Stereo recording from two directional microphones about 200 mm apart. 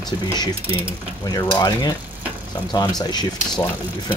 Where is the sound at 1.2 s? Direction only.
20° left (ahead or behind).